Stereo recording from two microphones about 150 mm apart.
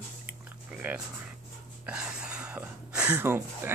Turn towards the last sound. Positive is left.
turn(degrees=-15)  # may be behind; listen again after turning